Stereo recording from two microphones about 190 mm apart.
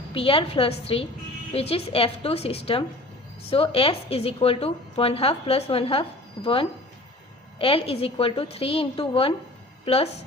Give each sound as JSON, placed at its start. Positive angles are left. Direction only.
{"t": 0.1, "sound": "a woman's voice", "side_deg": 30}